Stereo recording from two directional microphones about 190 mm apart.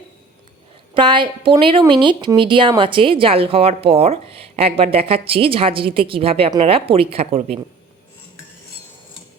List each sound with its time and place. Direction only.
0.9 s a woman's voice: 25° right (ahead or behind)